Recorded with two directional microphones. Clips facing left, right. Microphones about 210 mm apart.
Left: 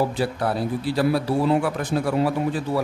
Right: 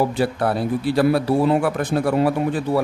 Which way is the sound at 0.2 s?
55° right (ahead or behind).